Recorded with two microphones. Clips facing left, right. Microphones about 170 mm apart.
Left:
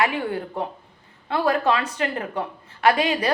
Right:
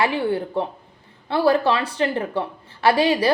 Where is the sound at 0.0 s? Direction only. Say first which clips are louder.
Right 3 dB; 30° right (ahead or behind).